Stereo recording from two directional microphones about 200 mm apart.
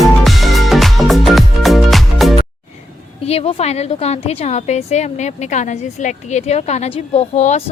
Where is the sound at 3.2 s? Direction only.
30° left (ahead or behind).